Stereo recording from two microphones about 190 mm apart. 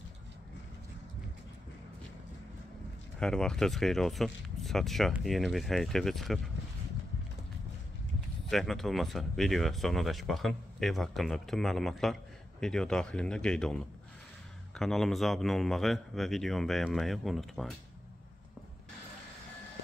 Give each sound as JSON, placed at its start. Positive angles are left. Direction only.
{"t": 3.2, "sound": "speech", "side_deg": 5}
{"t": 8.5, "sound": "speech", "side_deg": 0}